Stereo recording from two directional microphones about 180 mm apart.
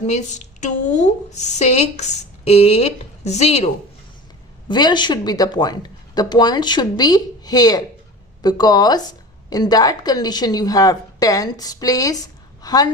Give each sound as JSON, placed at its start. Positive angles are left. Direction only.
{"t": 0.0, "sound": "a woman's voice", "side_deg": 40}
{"t": 4.7, "sound": "a woman's voice", "side_deg": 25}